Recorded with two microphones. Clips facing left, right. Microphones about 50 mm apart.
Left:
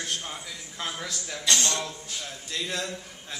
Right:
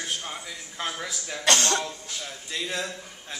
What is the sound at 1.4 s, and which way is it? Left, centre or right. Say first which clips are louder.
Speech: right 4 dB; right.